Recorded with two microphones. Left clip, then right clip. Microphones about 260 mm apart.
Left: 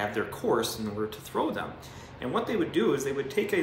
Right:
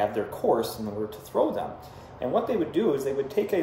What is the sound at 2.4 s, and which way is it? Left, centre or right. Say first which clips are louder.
Speech: right 2 dB; centre.